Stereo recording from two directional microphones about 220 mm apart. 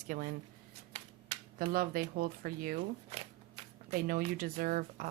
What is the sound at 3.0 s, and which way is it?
Shuffling cards, 25° right (ahead or behind).